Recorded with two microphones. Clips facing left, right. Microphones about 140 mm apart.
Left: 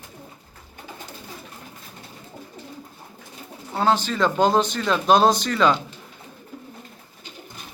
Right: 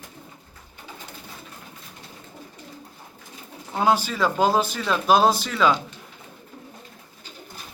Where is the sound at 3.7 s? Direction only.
10° right (ahead or behind).